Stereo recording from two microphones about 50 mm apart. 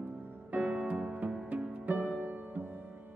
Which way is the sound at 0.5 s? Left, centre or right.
Right.